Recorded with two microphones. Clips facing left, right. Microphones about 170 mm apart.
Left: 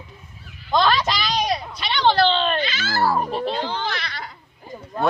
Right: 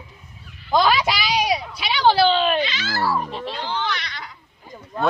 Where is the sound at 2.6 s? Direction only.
45° left (ahead or behind).